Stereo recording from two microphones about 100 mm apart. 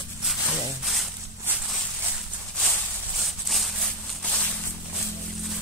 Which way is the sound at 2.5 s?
Centre (ahead or behind).